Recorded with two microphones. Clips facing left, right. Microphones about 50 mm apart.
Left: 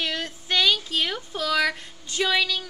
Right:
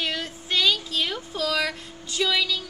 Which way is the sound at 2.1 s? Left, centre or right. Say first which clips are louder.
Left 1 dB; left.